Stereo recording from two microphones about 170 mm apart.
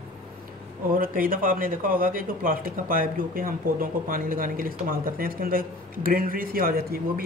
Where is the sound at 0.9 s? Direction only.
55° right (ahead or behind).